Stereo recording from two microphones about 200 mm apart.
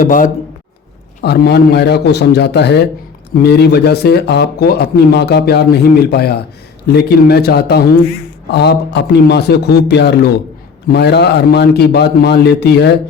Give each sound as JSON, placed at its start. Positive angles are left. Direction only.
{"t": 0.0, "sound": "speech", "side_deg": 40}
{"t": 1.2, "sound": "a man's voice", "side_deg": 55}